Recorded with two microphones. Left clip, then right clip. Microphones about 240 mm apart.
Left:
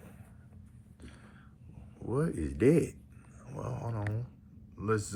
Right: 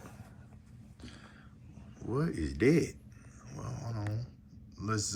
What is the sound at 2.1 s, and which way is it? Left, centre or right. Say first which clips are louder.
Speech: left 2 dB; centre.